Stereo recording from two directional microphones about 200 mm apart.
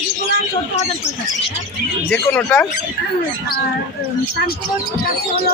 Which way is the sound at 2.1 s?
10° left (ahead or behind).